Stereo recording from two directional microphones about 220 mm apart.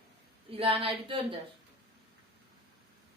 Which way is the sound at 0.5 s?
25° right (ahead or behind).